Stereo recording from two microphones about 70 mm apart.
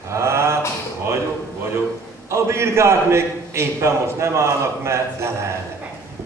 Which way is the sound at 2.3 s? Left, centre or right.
Right.